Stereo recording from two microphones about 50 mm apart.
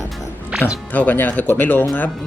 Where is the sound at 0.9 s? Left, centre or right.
Left.